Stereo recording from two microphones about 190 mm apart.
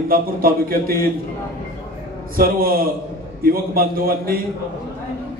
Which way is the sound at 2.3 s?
50° right (ahead or behind).